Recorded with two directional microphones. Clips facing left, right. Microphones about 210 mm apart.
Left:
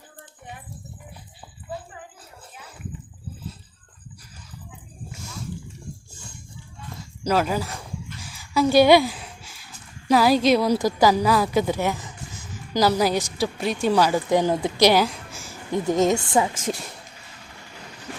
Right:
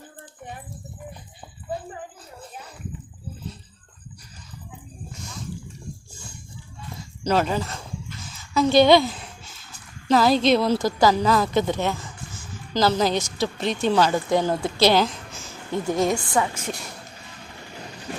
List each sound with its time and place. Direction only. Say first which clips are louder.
7.3 s speech: even; 5° left (ahead or behind)
8.2 s a sound: even; 10° left (ahead or behind)
10.1 s a woman's voice: even; 10° left (ahead or behind)
16.6 s speech: left 4 dB; 90° left